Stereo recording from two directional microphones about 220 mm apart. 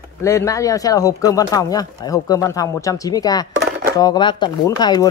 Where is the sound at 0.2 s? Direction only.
15° left (ahead or behind).